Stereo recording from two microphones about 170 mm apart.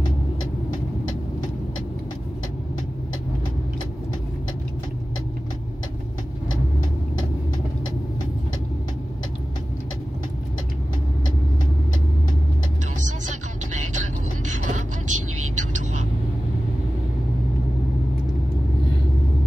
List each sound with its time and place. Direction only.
14.4 s vehicle: 45° right (ahead or behind)